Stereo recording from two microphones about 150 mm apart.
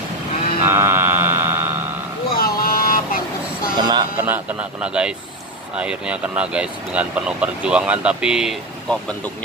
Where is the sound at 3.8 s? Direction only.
30° right (ahead or behind).